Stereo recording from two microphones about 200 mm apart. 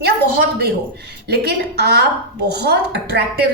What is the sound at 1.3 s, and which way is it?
A woman's voice, 55° right (ahead or behind).